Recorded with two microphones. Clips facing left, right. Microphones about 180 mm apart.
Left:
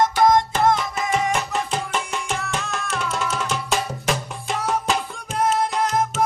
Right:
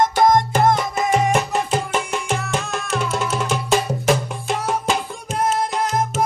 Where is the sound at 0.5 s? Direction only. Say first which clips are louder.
Right 2 dB; 50° right (ahead or behind).